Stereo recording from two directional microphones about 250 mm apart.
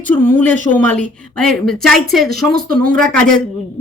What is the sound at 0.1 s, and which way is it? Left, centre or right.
Speech, centre.